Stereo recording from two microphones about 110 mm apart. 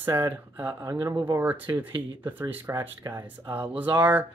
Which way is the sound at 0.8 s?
30° right (ahead or behind).